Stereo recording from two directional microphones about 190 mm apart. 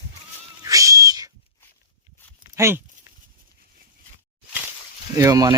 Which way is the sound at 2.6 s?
15° right (ahead or behind).